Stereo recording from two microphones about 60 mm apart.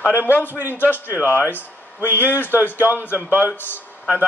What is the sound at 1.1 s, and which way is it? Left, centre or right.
A man's voice, right.